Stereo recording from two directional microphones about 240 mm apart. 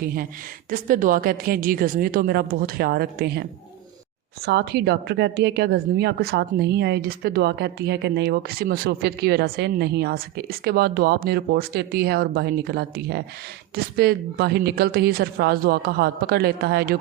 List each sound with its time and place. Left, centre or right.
0.0 s a woman's voice: right
4.4 s a woman's voice: right